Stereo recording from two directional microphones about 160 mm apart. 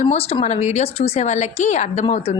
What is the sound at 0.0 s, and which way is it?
A woman's voice, 40° left (ahead or behind).